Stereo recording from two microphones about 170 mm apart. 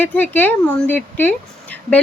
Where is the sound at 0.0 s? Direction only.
10° left (ahead or behind).